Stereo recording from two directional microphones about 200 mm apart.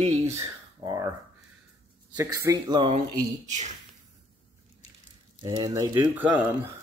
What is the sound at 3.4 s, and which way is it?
Speech, 35° right (ahead or behind).